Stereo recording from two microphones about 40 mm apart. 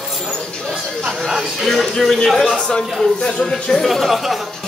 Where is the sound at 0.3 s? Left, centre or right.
Centre.